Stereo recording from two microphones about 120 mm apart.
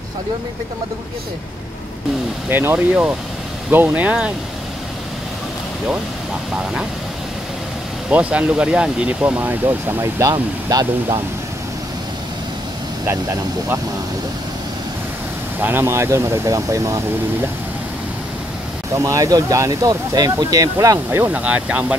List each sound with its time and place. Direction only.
2.5 s speech: 15° right (ahead or behind)
8.1 s speech: 10° right (ahead or behind)
10.3 s speech: 35° right (ahead or behind)
15.6 s speech: 20° right (ahead or behind)
18.9 s speech: 25° right (ahead or behind)
21.3 s speech: 10° right (ahead or behind)